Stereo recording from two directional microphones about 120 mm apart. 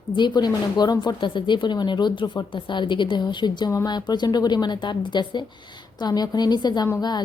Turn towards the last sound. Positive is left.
turn(degrees=30)  # may be behind; listen again after turning